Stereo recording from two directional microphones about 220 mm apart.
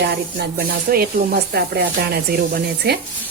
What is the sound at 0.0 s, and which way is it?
Speech, 50° right (ahead or behind).